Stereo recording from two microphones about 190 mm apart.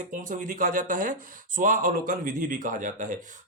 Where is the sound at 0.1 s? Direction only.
45° right (ahead or behind).